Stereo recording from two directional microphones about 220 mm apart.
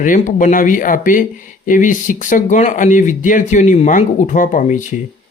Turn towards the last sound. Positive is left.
turn(degrees=35)  # may be behind; listen again after turning